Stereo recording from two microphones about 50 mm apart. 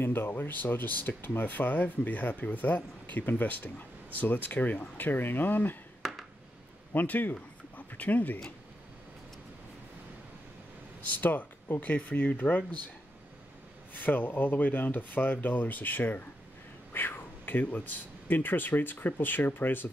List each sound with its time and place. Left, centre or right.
0.0 s speech: left
6.0 s a sound: centre
6.9 s speech: left
11.1 s speech: left
13.9 s speech: left